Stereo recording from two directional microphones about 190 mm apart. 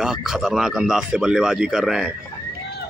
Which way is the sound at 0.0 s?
Centre (ahead or behind).